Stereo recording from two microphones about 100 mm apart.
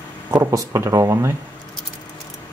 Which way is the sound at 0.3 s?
30° right (ahead or behind).